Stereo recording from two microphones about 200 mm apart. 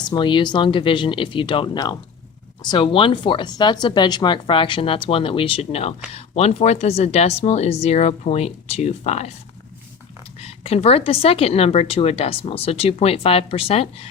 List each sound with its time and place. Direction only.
0.0 s a woman's voice: 20° left (ahead or behind)
10.4 s a woman's voice: 30° left (ahead or behind)